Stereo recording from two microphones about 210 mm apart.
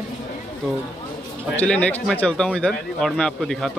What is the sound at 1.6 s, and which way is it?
Speech, 5° left (ahead or behind).